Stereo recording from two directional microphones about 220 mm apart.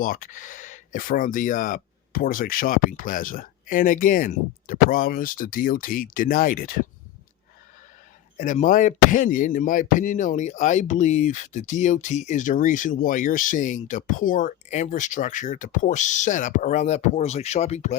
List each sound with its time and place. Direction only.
0.0 s speech: 40° left (ahead or behind)
8.4 s speech: 35° left (ahead or behind)